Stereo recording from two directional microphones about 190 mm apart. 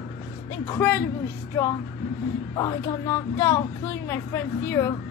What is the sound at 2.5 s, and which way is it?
Speech, 20° left (ahead or behind).